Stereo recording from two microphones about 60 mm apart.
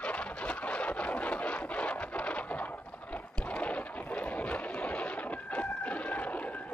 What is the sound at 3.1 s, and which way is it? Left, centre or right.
Boat, left.